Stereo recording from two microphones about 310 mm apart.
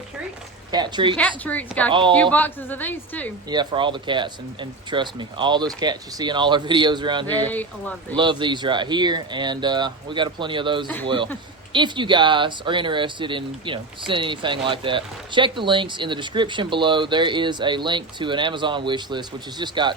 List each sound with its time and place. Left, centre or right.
0.7 s speech: centre
1.5 s a woman's voice: centre
1.9 s speech: centre
2.3 s a woman's voice: centre
3.5 s speech: centre
7.3 s a woman's voice: centre
8.1 s speech: centre